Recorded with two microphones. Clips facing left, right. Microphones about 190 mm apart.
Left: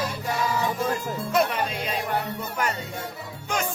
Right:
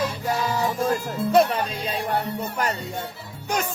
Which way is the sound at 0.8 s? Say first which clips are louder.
Right 3 dB; 35° right (ahead or behind).